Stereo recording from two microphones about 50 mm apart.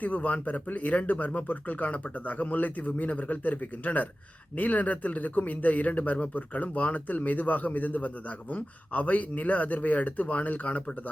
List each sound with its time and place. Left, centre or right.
0.0 s speech: left